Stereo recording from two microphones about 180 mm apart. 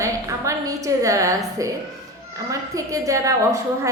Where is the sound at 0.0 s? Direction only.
20° right (ahead or behind).